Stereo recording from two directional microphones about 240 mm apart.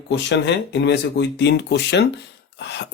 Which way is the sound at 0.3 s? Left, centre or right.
Left.